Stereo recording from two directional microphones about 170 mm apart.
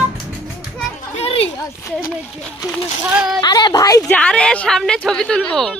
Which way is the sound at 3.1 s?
5° right (ahead or behind).